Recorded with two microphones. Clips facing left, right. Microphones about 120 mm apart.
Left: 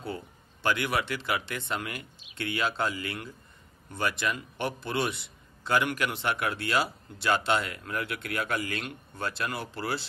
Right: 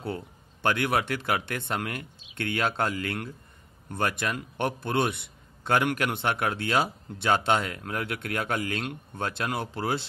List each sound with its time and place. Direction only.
0.0 s a man's voice: 60° right (ahead or behind)